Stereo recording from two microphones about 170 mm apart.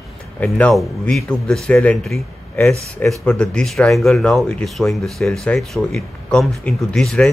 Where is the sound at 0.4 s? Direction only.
5° left (ahead or behind).